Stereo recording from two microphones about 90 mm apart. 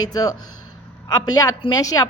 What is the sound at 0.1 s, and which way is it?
A woman's voice, 45° left (ahead or behind).